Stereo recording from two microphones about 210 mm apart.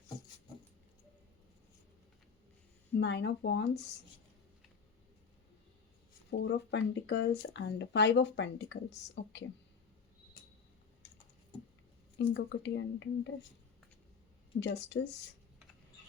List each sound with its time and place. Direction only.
3.0 s speech: 55° left (ahead or behind)
6.3 s speech: 60° left (ahead or behind)
12.1 s speech: 55° left (ahead or behind)
14.6 s speech: 55° left (ahead or behind)